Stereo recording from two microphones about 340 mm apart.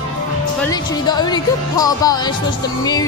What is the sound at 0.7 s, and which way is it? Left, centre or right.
Music, centre.